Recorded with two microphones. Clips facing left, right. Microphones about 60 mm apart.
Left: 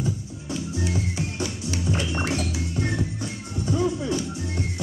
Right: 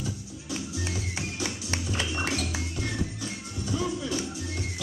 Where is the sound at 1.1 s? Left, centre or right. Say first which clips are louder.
Left 4 dB; right.